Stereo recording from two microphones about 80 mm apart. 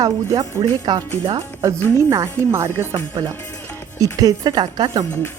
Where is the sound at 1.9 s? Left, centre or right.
Right.